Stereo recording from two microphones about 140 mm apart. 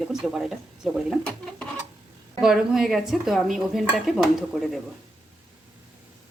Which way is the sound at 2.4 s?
5° right (ahead or behind).